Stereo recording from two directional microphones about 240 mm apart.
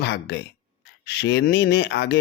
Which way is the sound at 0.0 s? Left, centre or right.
Left.